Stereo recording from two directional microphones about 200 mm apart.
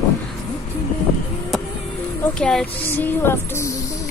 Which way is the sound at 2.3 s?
5° left (ahead or behind).